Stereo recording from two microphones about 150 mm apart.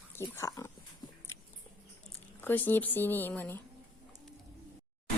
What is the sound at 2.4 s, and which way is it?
Speech, 15° left (ahead or behind).